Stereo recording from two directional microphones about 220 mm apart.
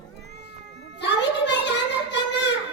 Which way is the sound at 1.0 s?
50° left (ahead or behind).